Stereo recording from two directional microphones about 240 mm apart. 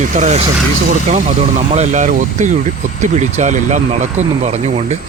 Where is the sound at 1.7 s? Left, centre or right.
Right.